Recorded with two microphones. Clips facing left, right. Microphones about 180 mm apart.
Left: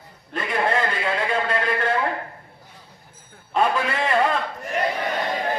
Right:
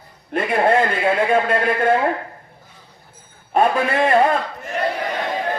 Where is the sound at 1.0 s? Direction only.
50° right (ahead or behind).